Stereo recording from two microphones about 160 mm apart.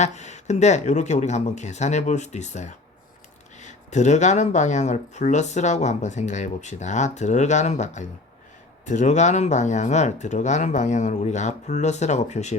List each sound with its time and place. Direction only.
0.0 s speech: 45° left (ahead or behind)